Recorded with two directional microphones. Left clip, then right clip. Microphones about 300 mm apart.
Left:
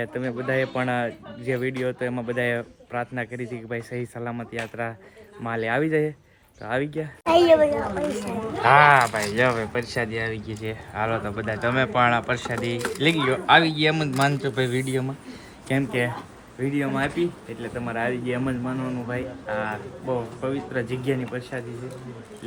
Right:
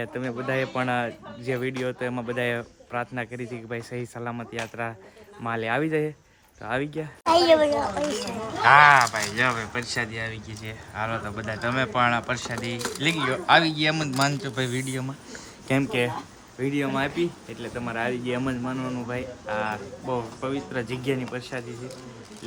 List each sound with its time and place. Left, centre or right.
0.0 s speech: centre
8.6 s speech: centre